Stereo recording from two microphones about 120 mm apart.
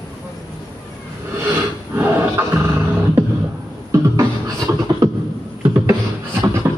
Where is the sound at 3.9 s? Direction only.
25° right (ahead or behind).